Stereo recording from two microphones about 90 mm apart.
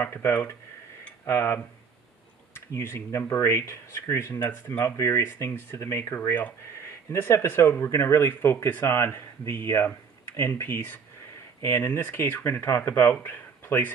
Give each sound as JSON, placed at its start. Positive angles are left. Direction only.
{"t": 0.0, "sound": "speech", "side_deg": 25}